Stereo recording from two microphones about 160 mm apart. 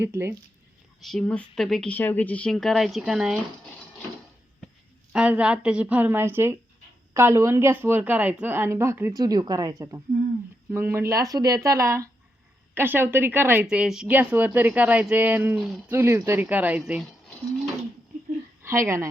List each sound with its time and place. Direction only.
0.0 s speech: 15° right (ahead or behind)
1.0 s speech: 5° left (ahead or behind)
5.1 s speech: 5° right (ahead or behind)
18.6 s speech: 15° right (ahead or behind)